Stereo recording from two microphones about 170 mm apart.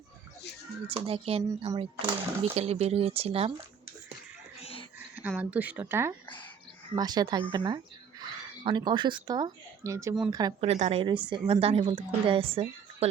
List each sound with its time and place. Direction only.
1.0 s speech: 35° right (ahead or behind)
4.6 s a sound: 35° left (ahead or behind)
5.4 s speech: 10° right (ahead or behind)
10.6 s speech: 40° right (ahead or behind)